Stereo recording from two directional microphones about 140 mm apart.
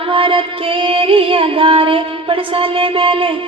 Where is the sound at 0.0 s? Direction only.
40° right (ahead or behind).